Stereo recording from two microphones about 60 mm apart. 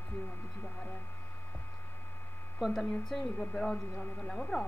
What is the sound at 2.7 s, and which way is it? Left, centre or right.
Speech, centre.